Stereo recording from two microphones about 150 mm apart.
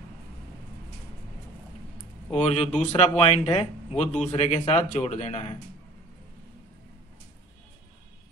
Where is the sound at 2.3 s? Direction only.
45° left (ahead or behind).